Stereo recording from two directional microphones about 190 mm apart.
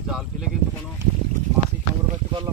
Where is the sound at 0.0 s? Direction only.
Centre (ahead or behind).